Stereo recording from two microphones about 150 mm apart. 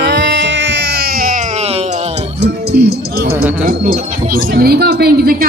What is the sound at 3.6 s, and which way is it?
Speech, 70° right (ahead or behind).